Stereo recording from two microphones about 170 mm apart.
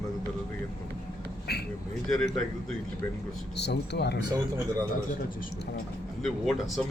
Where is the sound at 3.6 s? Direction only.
80° left.